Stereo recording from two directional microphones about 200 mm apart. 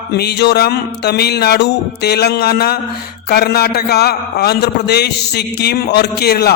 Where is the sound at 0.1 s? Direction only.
55° left (ahead or behind).